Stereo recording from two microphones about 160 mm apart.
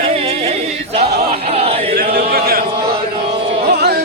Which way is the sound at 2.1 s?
70° right (ahead or behind).